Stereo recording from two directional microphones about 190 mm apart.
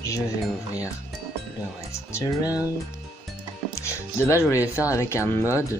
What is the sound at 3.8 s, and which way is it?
Speech, 15° left (ahead or behind).